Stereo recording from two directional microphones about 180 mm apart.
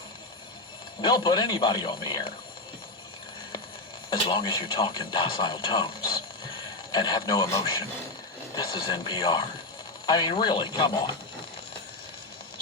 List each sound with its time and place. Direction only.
1.0 s speech: 25° left (ahead or behind)
4.1 s speech: 25° left (ahead or behind)